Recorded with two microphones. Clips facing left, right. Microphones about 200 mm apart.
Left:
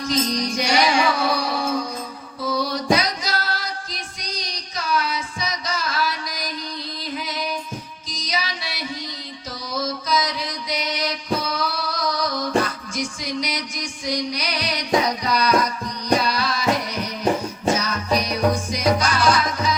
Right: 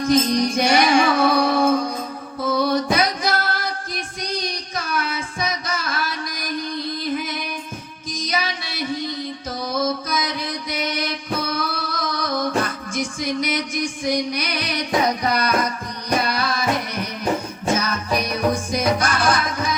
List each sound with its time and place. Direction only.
0.0 s music: 55° right (ahead or behind)
2.4 s female singing: 55° right (ahead or behind)
7.0 s music: 55° right (ahead or behind)
8.1 s female singing: 55° right (ahead or behind)
9.6 s music: 55° right (ahead or behind)
18.1 s music: 55° right (ahead or behind)